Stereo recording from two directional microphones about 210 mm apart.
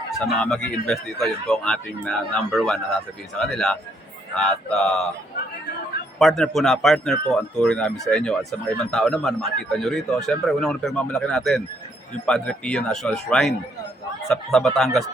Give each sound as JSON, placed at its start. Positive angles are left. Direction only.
{"t": 0.3, "sound": "a man's voice", "side_deg": 5}
{"t": 6.1, "sound": "a man's voice", "side_deg": 0}